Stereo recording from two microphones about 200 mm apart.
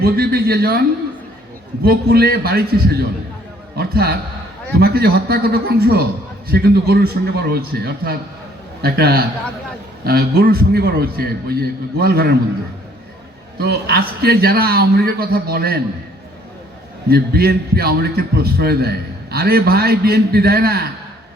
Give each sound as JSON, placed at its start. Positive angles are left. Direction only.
{"t": 0.0, "sound": "a man's voice", "side_deg": -50}
{"t": 1.8, "sound": "a man's voice", "side_deg": -50}
{"t": 13.6, "sound": "a man's voice", "side_deg": -55}
{"t": 17.1, "sound": "a man's voice", "side_deg": -50}